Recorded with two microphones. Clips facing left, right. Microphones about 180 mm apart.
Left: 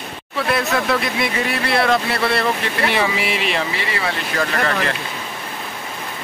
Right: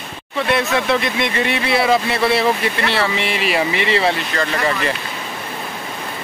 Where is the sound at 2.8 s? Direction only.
10° left (ahead or behind).